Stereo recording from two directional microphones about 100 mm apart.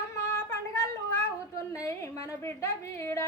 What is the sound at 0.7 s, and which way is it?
Cat, 30° left (ahead or behind).